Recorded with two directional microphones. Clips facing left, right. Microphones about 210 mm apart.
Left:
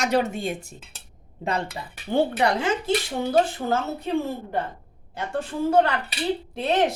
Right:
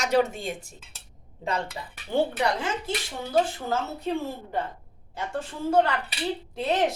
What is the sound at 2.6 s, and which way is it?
Speech, 75° left (ahead or behind).